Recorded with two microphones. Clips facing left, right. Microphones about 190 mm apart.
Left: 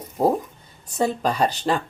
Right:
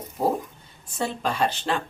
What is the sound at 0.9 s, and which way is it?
Speech, 40° left (ahead or behind).